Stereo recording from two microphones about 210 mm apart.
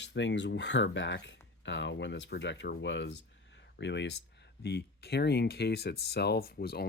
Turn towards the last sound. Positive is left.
turn(degrees=50)  # may be behind; listen again after turning